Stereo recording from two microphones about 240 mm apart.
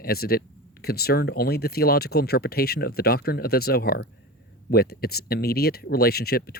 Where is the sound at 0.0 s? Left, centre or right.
Left.